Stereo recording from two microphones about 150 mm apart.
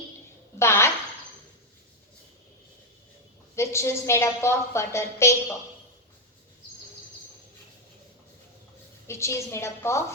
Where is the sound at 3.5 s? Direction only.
20° left (ahead or behind).